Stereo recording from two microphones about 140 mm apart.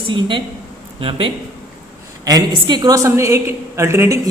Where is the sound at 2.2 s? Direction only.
30° right (ahead or behind).